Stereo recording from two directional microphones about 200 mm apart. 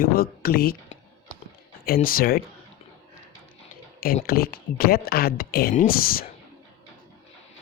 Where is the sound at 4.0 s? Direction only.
45° left (ahead or behind).